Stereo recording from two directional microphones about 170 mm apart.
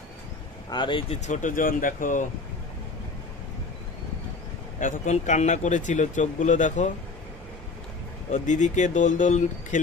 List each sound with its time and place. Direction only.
0.7 s speech: 30° left (ahead or behind)
1.2 s speech: 45° left (ahead or behind)
4.7 s speech: 45° left (ahead or behind)
8.3 s speech: 45° left (ahead or behind)